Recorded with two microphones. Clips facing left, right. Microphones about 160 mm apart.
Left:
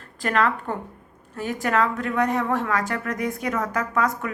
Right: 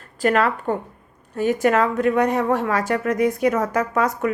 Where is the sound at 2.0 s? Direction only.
20° right (ahead or behind).